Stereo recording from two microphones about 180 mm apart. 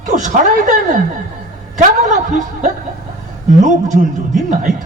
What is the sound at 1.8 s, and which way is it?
A woman's voice, 45° right (ahead or behind).